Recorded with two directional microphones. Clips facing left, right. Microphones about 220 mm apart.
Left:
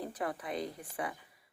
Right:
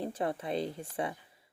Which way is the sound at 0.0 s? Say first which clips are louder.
Right 4 dB; 25° right (ahead or behind).